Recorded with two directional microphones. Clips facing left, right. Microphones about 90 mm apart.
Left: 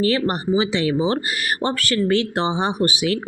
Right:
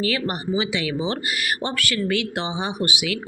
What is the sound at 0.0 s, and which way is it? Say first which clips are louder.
Speech: left 5 dB; 35° left (ahead or behind).